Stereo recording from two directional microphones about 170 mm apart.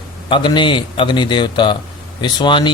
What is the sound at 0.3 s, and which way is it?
Speech, 30° left (ahead or behind).